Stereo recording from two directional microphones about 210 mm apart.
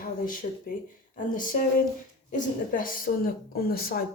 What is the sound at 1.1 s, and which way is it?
A woman's voice, 40° left (ahead or behind).